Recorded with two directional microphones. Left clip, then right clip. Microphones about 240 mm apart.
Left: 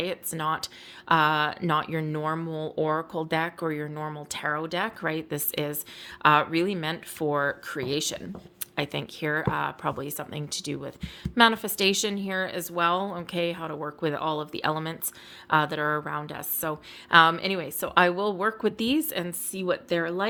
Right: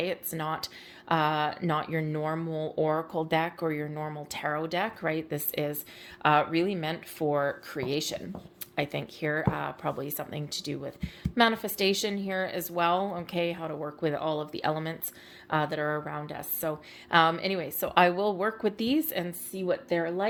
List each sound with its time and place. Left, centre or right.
0.0 s a woman's voice: centre